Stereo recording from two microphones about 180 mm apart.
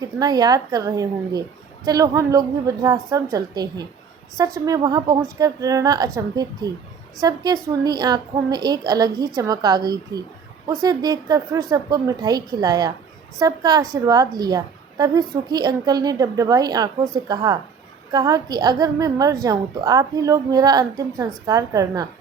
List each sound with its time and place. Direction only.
0.0 s a woman's voice: 20° right (ahead or behind)